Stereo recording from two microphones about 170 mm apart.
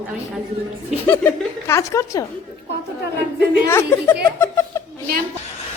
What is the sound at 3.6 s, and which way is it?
Speech, 15° left (ahead or behind).